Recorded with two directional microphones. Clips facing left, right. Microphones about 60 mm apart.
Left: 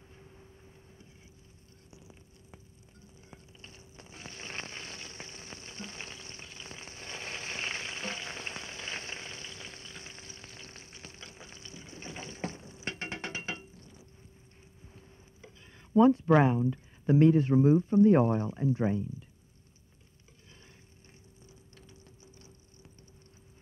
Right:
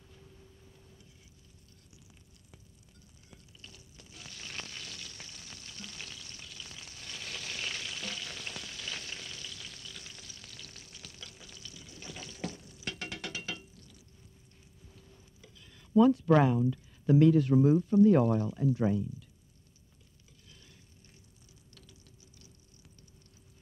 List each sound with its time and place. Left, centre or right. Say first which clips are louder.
0.1 s a sound: left 1 dB; left
14.9 s speech: left 1 dB; left
21.7 s ratchet: left 1 dB; left